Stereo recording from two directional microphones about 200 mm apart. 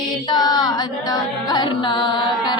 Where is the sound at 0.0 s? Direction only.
20° left (ahead or behind).